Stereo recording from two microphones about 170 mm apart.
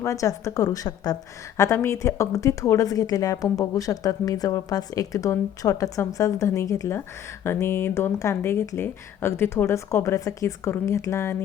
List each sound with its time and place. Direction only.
0.0 s a woman's voice: 20° left (ahead or behind)